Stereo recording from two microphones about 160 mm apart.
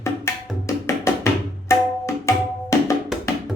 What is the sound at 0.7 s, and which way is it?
Tabla, 20° left (ahead or behind).